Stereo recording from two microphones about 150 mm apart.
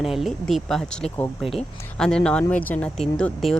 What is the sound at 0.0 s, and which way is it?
Speech, centre (ahead or behind).